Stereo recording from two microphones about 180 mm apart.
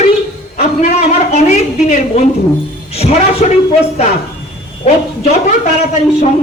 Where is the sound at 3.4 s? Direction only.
40° left (ahead or behind).